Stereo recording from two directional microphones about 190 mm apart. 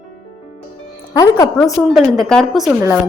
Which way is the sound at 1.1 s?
20° left (ahead or behind).